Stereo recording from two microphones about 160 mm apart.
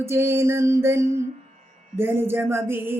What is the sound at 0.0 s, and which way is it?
Music, 15° right (ahead or behind).